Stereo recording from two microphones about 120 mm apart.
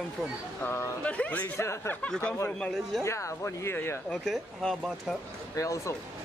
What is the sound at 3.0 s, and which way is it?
Speech, 25° left (ahead or behind).